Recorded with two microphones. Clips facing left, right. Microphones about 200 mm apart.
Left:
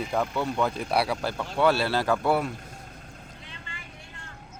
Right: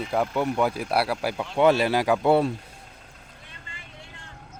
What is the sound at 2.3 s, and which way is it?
Speech, 30° right (ahead or behind).